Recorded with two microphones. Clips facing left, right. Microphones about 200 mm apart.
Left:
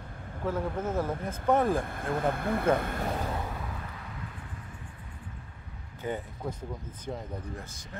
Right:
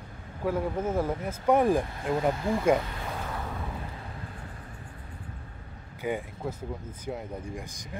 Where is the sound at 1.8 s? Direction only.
55° left (ahead or behind).